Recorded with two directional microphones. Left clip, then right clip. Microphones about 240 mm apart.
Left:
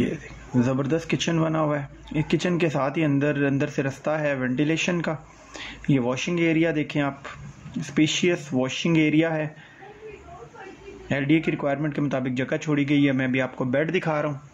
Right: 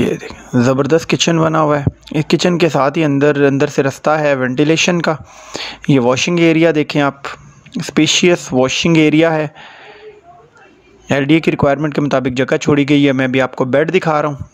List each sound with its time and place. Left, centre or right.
0.0 s speech: right
11.1 s speech: right